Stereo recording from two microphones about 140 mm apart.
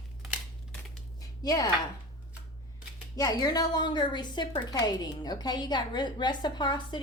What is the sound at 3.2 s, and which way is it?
A woman's voice, 25° left (ahead or behind).